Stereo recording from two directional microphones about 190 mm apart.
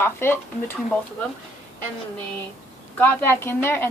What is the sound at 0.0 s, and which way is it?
Speech, 10° left (ahead or behind).